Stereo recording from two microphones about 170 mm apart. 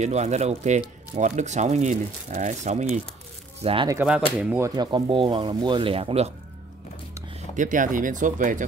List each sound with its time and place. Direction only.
0.0 s speech: 40° right (ahead or behind)
3.6 s speech: 30° right (ahead or behind)
3.9 s speech: 10° right (ahead or behind); by 6.3 s 35° right (ahead or behind)
7.5 s speech: 50° right (ahead or behind)